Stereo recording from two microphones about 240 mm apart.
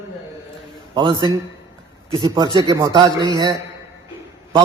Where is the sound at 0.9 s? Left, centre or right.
Centre.